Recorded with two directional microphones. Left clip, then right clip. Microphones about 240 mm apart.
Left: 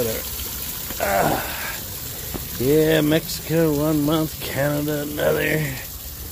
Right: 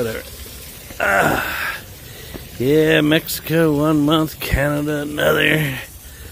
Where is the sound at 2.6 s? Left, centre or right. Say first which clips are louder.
Right 3 dB; right.